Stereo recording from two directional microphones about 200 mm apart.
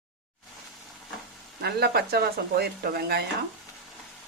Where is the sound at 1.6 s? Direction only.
55° right (ahead or behind).